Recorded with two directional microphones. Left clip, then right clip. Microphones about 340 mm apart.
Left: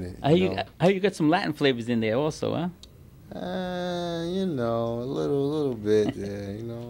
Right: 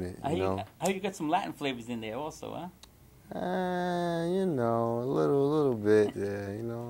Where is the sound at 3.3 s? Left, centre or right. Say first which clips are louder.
Even; right.